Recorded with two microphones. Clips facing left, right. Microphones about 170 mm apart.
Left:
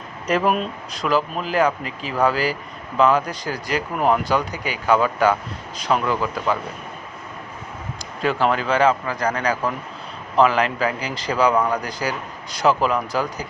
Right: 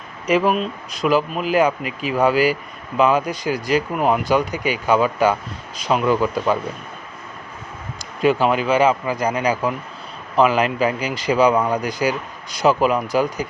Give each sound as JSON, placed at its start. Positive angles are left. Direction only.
{"t": 0.3, "sound": "speech", "side_deg": -5}
{"t": 1.0, "sound": "speech", "side_deg": -10}
{"t": 8.2, "sound": "speech", "side_deg": -15}